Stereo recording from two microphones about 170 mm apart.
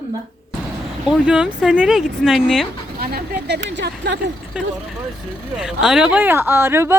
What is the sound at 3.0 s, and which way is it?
Speech, 65° right (ahead or behind).